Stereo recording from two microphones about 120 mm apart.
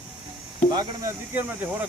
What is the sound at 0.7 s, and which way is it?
Speech, 40° right (ahead or behind).